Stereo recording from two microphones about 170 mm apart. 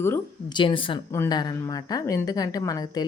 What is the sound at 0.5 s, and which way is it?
A woman's voice, 30° left (ahead or behind).